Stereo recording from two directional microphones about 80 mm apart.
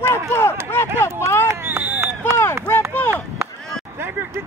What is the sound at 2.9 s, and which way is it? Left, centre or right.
Chop, left.